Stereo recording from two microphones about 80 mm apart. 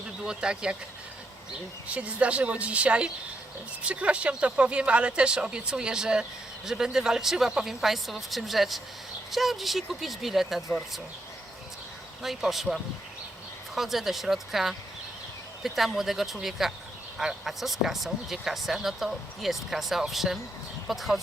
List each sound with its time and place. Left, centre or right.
0.3 s speech: centre
1.9 s speech: centre
12.2 s speech: centre